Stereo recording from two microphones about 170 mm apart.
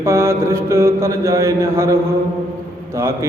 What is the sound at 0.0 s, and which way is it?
A man's voice, 15° right (ahead or behind).